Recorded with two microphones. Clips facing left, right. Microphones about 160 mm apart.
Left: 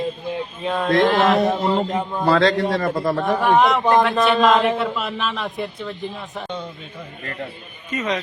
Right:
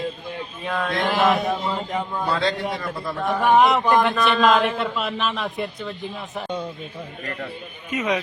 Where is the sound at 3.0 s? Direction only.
65° left (ahead or behind).